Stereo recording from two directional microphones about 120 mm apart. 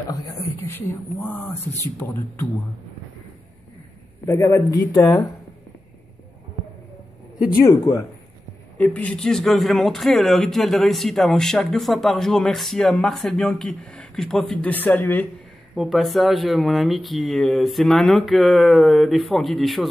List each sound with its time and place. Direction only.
0.1 s a woman's voice: 30° left (ahead or behind)
4.3 s a woman's voice: 25° left (ahead or behind)
7.6 s a woman's voice: 25° left (ahead or behind)
8.7 s a man's voice: 10° left (ahead or behind)
14.7 s speech: 15° left (ahead or behind)
15.7 s a man's voice: centre (ahead or behind)